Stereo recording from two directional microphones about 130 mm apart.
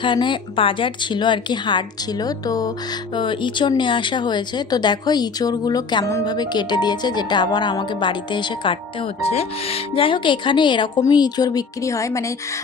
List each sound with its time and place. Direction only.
0.0 s speech: 40° left (ahead or behind)